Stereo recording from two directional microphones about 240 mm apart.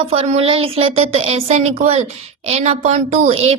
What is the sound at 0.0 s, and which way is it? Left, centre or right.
A woman's voice, right.